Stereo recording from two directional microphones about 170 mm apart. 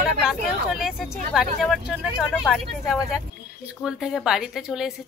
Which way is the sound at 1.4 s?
Centre (ahead or behind).